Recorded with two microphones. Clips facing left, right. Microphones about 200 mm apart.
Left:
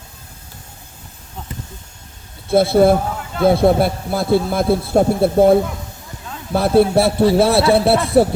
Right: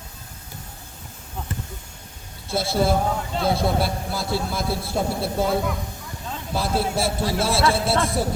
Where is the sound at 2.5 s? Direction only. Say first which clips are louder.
Left 9 dB; 55° left (ahead or behind).